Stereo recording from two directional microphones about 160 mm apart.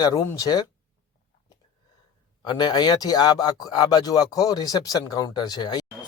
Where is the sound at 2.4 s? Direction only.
25° left (ahead or behind).